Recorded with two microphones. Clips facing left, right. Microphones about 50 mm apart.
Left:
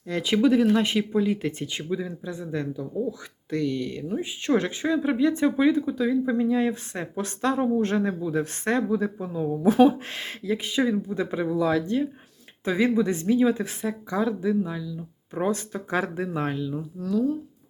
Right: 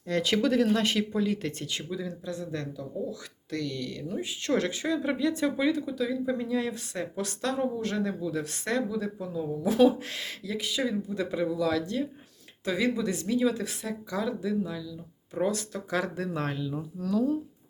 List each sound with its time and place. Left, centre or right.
0.1 s speech: centre